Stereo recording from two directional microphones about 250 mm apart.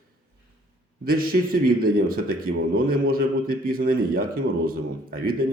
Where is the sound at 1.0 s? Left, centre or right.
Right.